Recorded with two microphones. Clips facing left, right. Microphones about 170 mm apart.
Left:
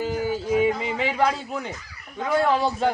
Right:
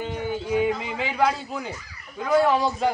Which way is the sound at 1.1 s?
Centre (ahead or behind).